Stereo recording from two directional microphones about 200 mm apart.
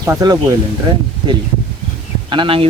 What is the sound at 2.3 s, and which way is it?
Speech, 25° right (ahead or behind).